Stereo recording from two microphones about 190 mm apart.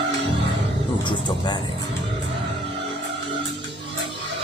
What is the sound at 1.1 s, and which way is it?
Vehicle, 25° left (ahead or behind).